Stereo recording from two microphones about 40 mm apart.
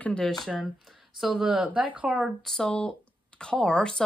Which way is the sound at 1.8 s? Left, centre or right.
Right.